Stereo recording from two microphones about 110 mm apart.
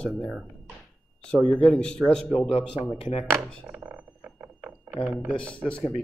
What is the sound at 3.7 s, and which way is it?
Glass, 15° right (ahead or behind).